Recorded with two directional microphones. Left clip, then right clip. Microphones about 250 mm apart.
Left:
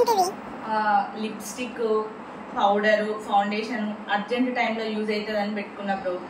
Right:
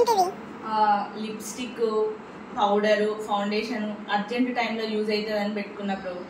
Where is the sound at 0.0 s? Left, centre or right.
Centre.